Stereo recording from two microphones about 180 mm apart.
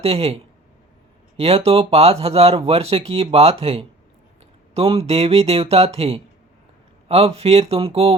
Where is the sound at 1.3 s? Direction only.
35° right (ahead or behind).